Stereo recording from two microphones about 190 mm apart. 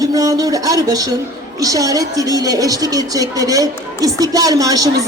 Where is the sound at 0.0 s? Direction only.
20° right (ahead or behind).